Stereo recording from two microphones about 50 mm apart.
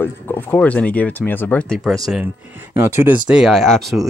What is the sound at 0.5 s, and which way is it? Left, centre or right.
Speech, left.